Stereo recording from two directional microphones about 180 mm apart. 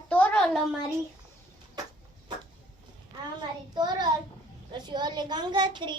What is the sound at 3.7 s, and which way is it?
A woman's voice, 25° right (ahead or behind).